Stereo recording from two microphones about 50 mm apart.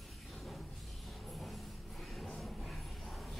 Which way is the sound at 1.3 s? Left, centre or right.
Centre.